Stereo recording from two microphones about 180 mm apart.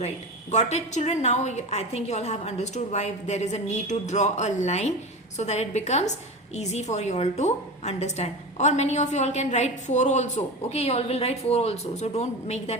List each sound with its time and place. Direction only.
0.5 s a woman's voice: 40° left (ahead or behind)